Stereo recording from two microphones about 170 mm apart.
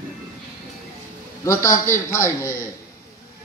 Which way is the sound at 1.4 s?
15° left (ahead or behind).